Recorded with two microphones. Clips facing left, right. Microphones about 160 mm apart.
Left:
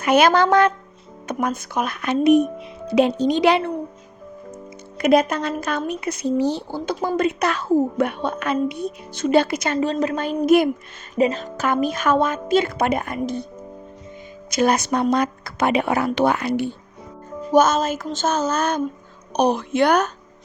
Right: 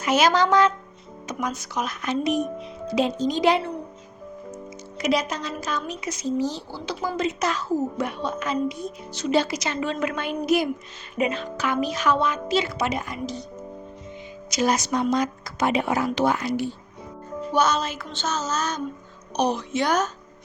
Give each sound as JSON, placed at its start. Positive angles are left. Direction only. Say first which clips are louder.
{"t": 0.0, "sound": "speech", "louder": "left 4 dB", "side_deg": 60}
{"t": 4.9, "sound": "speech", "louder": "left 7 dB", "side_deg": 55}
{"t": 9.7, "sound": "a woman's voice", "louder": "left 6 dB", "side_deg": 35}
{"t": 11.1, "sound": "speech", "louder": "left 5 dB", "side_deg": 40}
{"t": 14.5, "sound": "speech", "louder": "left 4 dB", "side_deg": 55}
{"t": 17.5, "sound": "speech", "louder": "left 6 dB", "side_deg": 45}